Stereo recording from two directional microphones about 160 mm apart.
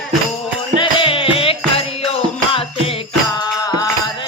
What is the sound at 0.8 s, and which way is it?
Music, 35° left (ahead or behind).